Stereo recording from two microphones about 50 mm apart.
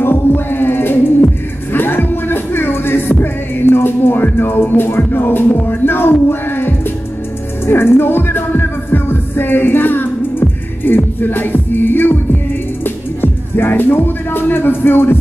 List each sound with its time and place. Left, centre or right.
0.0 s music: left